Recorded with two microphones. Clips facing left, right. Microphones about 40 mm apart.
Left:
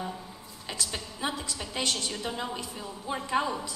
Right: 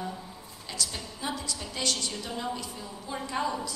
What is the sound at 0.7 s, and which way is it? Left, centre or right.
A woman's voice, left.